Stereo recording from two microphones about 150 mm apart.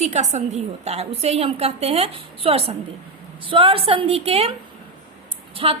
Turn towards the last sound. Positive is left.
turn(degrees=-40)  # may be behind; listen again after turning